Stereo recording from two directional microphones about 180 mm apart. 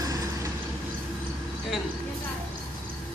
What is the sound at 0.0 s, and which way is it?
Vehicle, 20° right (ahead or behind).